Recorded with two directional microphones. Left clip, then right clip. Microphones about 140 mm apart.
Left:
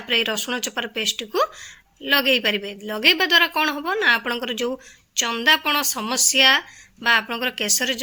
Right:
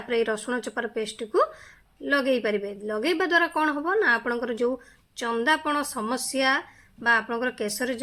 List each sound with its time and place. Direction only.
0.1 s a woman's voice: 15° left (ahead or behind)